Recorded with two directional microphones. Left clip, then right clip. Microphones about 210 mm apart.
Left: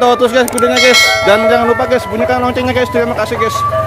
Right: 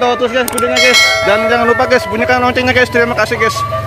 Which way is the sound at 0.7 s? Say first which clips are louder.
Even; centre (ahead or behind).